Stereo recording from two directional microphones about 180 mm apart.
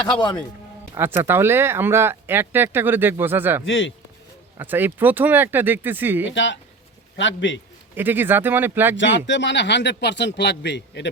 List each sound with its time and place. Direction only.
0.1 s speech: 25° left (ahead or behind)
0.9 s speech: 15° right (ahead or behind)
3.7 s a man's voice: 90° left
4.5 s speech: 10° right (ahead or behind)
6.2 s a man's voice: 90° left
7.9 s speech: 10° right (ahead or behind)
9.0 s speech: 85° left